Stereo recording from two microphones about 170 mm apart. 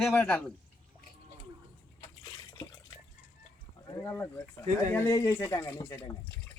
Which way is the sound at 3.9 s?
15° left (ahead or behind).